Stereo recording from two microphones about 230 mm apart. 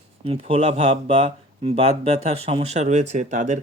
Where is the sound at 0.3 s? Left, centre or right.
Right.